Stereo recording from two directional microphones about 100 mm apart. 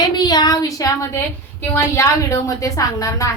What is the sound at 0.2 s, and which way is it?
A woman's voice, 45° left (ahead or behind).